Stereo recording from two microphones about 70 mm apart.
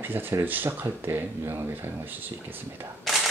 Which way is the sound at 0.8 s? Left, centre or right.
Right.